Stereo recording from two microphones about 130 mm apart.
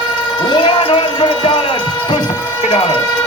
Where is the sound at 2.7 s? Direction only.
45° left (ahead or behind).